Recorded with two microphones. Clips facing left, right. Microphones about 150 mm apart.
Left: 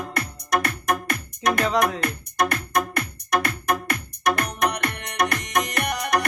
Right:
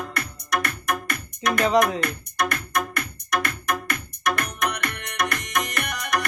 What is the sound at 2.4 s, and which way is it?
Music, 35° left (ahead or behind).